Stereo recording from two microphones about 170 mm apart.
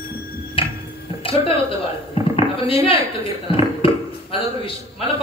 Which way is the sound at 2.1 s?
35° left (ahead or behind).